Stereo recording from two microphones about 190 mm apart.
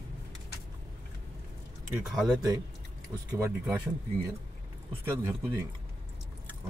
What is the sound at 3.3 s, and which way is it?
Speech, 15° right (ahead or behind).